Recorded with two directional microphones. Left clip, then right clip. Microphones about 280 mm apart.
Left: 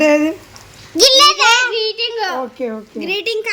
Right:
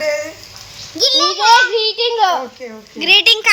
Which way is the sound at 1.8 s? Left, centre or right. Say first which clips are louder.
Right 3 dB; right.